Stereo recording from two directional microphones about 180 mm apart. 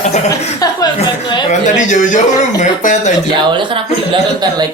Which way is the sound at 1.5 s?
45° left (ahead or behind).